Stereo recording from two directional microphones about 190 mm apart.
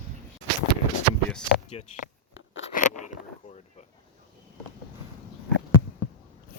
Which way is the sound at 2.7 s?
40° left (ahead or behind).